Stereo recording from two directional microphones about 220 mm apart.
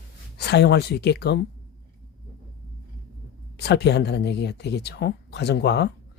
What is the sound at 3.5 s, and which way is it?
Speech, 50° left (ahead or behind).